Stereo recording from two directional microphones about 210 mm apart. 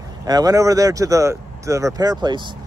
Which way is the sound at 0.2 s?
15° right (ahead or behind).